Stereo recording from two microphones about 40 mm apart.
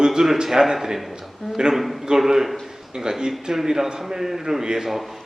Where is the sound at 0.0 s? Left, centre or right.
Centre.